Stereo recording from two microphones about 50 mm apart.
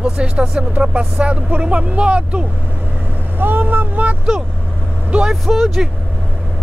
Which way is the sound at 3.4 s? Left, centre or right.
Right.